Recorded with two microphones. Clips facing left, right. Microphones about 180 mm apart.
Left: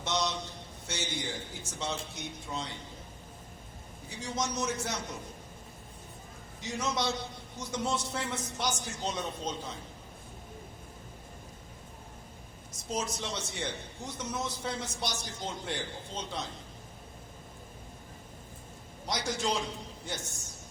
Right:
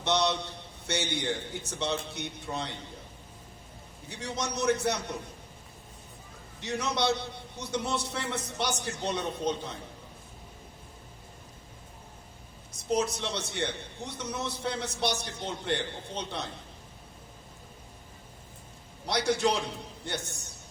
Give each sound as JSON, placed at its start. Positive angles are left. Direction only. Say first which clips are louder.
{"t": 0.0, "sound": "a man's voice", "louder": "right 5 dB", "side_deg": -65}
{"t": 4.1, "sound": "a man's voice", "louder": "even", "side_deg": -65}
{"t": 6.6, "sound": "a man's voice", "louder": "right 3 dB", "side_deg": -65}
{"t": 12.9, "sound": "a man's voice", "louder": "right 6 dB", "side_deg": -65}
{"t": 19.0, "sound": "a man's voice", "louder": "right 6 dB", "side_deg": -65}